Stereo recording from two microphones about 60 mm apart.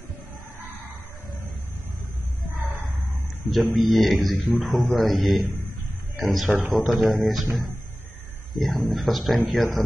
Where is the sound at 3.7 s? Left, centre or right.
Centre.